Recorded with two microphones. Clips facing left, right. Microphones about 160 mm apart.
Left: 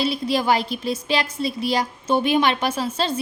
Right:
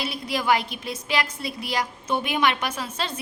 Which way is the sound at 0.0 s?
30° left (ahead or behind).